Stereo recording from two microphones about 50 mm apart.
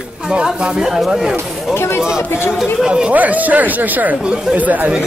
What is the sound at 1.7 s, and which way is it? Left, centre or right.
Speech, left.